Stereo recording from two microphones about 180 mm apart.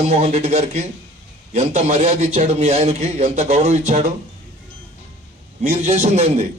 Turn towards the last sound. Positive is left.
turn(degrees=-40)  # may be behind; listen again after turning